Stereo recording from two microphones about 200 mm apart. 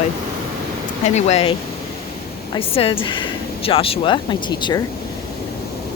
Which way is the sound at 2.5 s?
30° left (ahead or behind).